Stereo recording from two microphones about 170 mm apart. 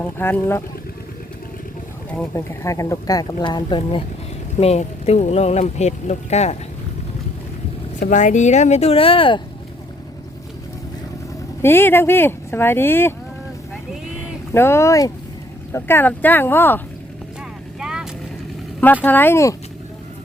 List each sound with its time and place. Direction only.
0.0 s speech: 10° left (ahead or behind)
2.0 s speech: 10° left (ahead or behind); by 4.0 s 30° left (ahead or behind)
4.5 s speech: 40° left (ahead or behind)
7.9 s speech: 45° left (ahead or behind); by 9.4 s 30° left (ahead or behind)
11.6 s speech: 15° left (ahead or behind)
14.5 s speech: 15° left (ahead or behind)
17.7 s vehicle: 5° right (ahead or behind)
19.0 s speech: 10° left (ahead or behind)